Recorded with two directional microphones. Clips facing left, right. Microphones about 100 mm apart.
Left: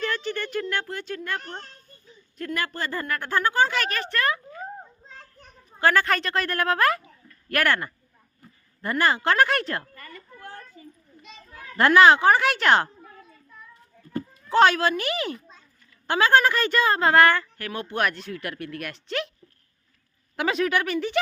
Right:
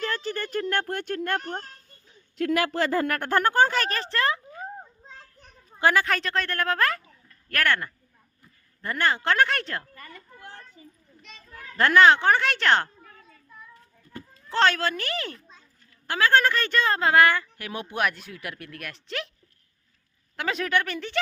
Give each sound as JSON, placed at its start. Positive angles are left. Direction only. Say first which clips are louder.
{"t": 0.0, "sound": "speech", "louder": "left 1 dB", "side_deg": -35}
{"t": 2.4, "sound": "speech", "louder": "right 6 dB", "side_deg": -90}
{"t": 3.2, "sound": "speech", "louder": "even", "side_deg": -55}
{"t": 5.8, "sound": "speech", "louder": "left 1 dB", "side_deg": -10}
{"t": 6.1, "sound": "speech", "louder": "left 2 dB", "side_deg": 0}
{"t": 9.9, "sound": "a sound", "louder": "left 1 dB", "side_deg": -20}
{"t": 10.8, "sound": "children playing", "louder": "left 4 dB", "side_deg": -25}
{"t": 11.2, "sound": "children playing", "louder": "left 1 dB", "side_deg": 15}
{"t": 14.5, "sound": "a child's voice", "louder": "left 4 dB", "side_deg": 10}
{"t": 16.0, "sound": "a woman's voice", "louder": "left 2 dB", "side_deg": 25}
{"t": 16.3, "sound": "speech", "louder": "left 1 dB", "side_deg": 10}
{"t": 20.3, "sound": "speech", "louder": "left 2 dB", "side_deg": 5}